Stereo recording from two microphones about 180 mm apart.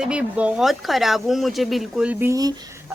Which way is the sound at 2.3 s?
20° right (ahead or behind).